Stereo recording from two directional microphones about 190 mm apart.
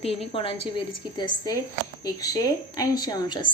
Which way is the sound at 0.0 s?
30° left (ahead or behind).